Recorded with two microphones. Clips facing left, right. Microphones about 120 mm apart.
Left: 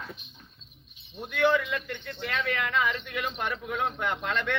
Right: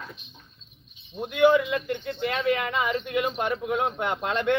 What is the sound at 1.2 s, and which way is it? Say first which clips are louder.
Speech: right 5 dB; 15° right (ahead or behind).